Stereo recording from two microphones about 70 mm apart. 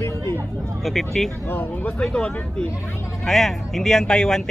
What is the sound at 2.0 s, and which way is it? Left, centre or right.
Speech, centre.